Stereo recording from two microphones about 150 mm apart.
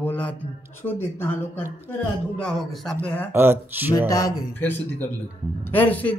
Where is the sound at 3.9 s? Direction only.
25° left (ahead or behind).